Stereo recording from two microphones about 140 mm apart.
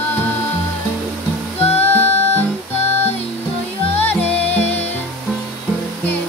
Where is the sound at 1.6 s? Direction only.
45° left (ahead or behind).